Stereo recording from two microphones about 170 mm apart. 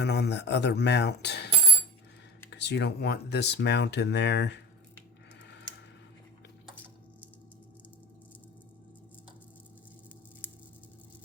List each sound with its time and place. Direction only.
0.0 s speech: 80° left
2.5 s speech: 90° left